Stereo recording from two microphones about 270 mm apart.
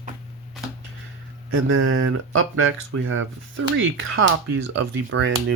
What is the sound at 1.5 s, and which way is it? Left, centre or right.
Speech, right.